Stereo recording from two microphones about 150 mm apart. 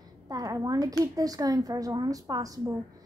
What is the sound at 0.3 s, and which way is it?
A woman's voice, 25° right (ahead or behind).